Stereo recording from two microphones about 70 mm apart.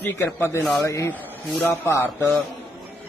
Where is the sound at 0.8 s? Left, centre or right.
Left.